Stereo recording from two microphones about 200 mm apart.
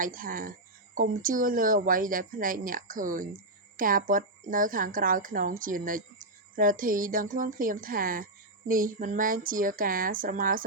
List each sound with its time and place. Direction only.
0.0 s speech: 45° right (ahead or behind)